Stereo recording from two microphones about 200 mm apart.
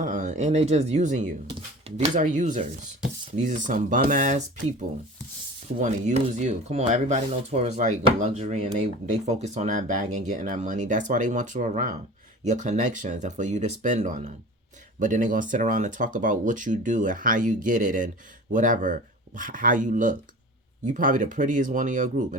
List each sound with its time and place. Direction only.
0.0 s speech: 35° right (ahead or behind)
5.8 s speech: 35° right (ahead or behind)